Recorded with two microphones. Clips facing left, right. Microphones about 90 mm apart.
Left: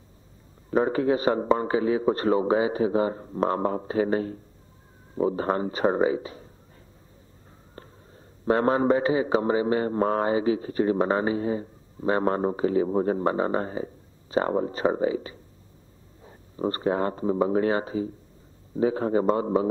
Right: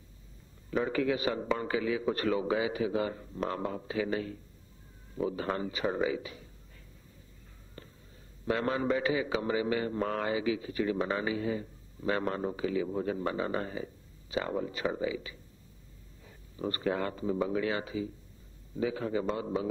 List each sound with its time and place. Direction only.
0.7 s a man's voice: 40° left (ahead or behind)
7.7 s a man's voice: 40° left (ahead or behind)